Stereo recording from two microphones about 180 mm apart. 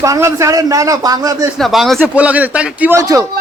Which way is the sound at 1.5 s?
Centre (ahead or behind).